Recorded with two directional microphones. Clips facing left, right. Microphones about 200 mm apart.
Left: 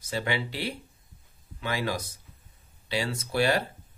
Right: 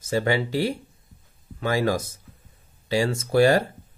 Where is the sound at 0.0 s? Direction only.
45° right (ahead or behind).